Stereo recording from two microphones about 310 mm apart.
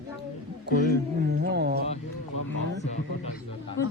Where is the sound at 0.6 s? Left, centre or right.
Right.